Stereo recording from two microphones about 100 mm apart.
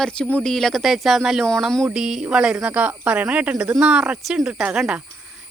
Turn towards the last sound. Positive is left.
turn(degrees=-10)  # may be behind; listen again after turning